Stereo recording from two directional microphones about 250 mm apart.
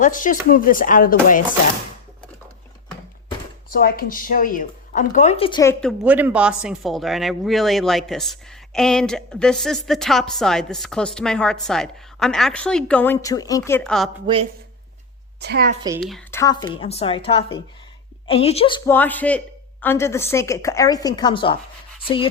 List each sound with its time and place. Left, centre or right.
0.0 s speech: left
3.7 s speech: left; by 5.7 s centre
5.8 s speech: centre
15.4 s a woman's voice: right
16.0 s speech: centre
16.4 s a woman's voice: centre
18.9 s a woman's voice: centre